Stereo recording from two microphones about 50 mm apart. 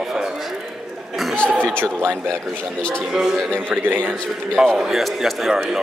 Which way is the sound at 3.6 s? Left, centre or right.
Right.